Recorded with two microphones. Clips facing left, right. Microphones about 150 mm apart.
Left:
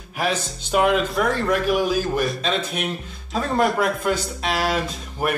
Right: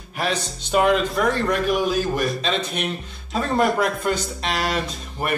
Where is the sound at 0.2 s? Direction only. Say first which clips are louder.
Left 1 dB; 5° left (ahead or behind).